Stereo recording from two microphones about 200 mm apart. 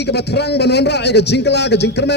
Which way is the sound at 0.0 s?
55° left (ahead or behind).